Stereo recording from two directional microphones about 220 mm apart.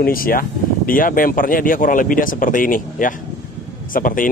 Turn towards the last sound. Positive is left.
turn(degrees=40)  # may be behind; listen again after turning